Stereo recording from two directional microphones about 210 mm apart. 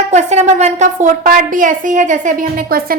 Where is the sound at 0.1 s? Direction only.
35° right (ahead or behind).